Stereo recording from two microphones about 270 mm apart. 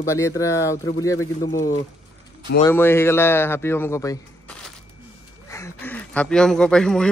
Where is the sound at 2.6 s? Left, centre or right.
Centre.